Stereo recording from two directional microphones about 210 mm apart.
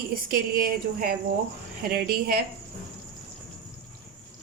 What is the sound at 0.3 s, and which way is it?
Speech, 45° right (ahead or behind).